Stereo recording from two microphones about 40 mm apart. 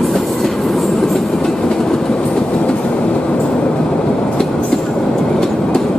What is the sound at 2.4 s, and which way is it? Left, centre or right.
Train, left.